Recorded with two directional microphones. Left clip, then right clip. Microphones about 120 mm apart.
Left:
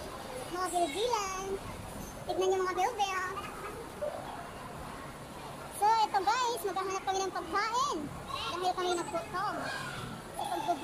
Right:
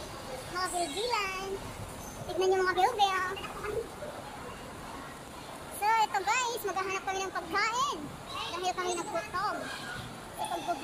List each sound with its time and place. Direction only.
0.6 s speech: 15° left (ahead or behind)
2.4 s a child's voice: 5° left (ahead or behind)
5.8 s speech: 15° left (ahead or behind)